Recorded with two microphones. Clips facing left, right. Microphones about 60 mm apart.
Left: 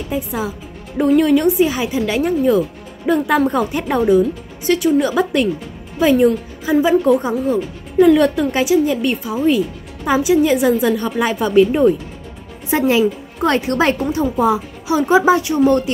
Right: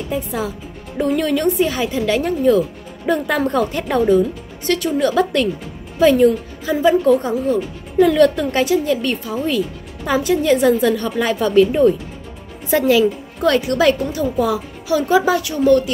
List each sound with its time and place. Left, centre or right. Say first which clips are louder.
0.1 s a woman's voice: left 1 dB; centre
12.6 s a woman's voice: right 1 dB; left